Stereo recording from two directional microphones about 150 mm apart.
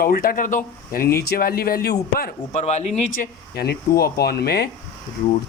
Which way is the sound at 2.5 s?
50° left (ahead or behind).